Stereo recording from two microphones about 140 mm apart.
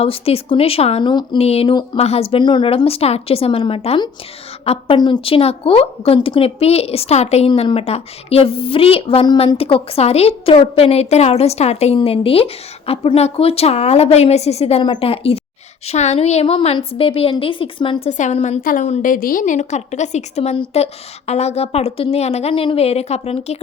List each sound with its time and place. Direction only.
0.0 s a woman's voice: 45° left (ahead or behind)
4.9 s a woman's voice: 35° left (ahead or behind)
18.1 s a woman's voice: 55° left (ahead or behind)
18.6 s a woman's voice: 80° left; by 23.6 s 50° left (ahead or behind)